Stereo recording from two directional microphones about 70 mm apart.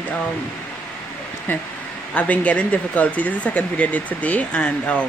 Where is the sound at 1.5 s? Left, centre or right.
Left.